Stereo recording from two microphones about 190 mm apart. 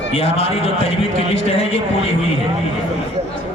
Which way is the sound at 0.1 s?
30° left (ahead or behind).